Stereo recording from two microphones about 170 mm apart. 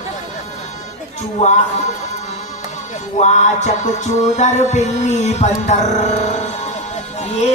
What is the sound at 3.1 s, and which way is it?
Music, 45° left (ahead or behind).